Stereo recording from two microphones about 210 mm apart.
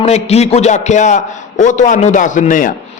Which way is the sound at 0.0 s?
30° left (ahead or behind).